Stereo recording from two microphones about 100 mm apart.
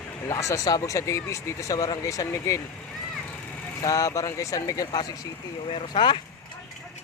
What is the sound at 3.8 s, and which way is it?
Speech, 35° left (ahead or behind).